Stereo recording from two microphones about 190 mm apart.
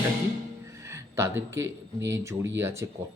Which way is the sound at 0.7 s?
15° right (ahead or behind).